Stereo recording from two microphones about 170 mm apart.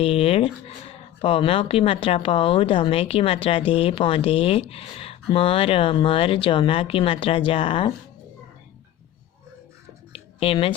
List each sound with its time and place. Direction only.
0.0 s speech: 35° left (ahead or behind)
10.1 s music: 35° left (ahead or behind)